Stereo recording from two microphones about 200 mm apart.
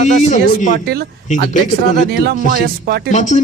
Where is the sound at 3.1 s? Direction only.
35° left (ahead or behind).